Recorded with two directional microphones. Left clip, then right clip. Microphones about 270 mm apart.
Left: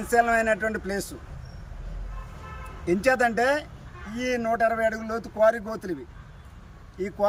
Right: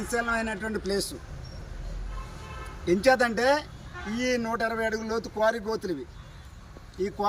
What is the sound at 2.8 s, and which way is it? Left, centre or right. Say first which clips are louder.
Speech: even; centre.